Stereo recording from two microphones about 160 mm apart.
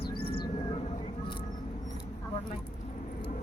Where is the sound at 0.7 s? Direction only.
35° left (ahead or behind).